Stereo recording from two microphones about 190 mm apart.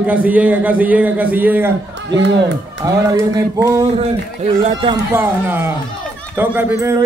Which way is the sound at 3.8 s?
35° right (ahead or behind).